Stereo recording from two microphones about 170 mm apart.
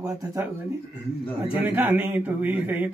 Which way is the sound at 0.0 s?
20° right (ahead or behind).